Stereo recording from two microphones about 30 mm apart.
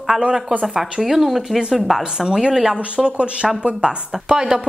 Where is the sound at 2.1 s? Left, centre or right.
Right.